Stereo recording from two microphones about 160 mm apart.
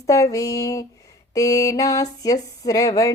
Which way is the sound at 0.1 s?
20° left (ahead or behind).